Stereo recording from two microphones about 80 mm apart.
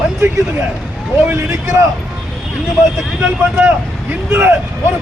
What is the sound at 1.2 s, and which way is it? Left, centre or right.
Speech, right.